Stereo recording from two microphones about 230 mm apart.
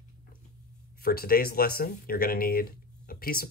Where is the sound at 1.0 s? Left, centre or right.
Left.